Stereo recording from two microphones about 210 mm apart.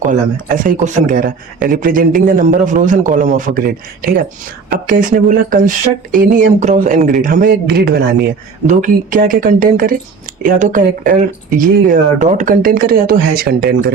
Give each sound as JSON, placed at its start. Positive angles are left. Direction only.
{"t": 0.0, "sound": "speech", "side_deg": -40}